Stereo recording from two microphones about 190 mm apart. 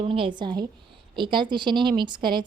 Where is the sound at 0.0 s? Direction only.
25° right (ahead or behind).